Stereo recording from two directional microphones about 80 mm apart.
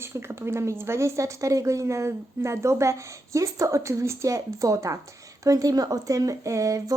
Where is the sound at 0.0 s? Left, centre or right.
Right.